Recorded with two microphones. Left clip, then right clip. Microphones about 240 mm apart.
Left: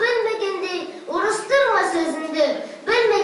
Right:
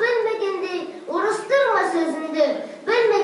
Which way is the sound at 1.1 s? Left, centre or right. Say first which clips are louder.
Left 1 dB; centre.